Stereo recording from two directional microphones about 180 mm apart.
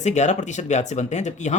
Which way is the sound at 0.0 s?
40° left (ahead or behind).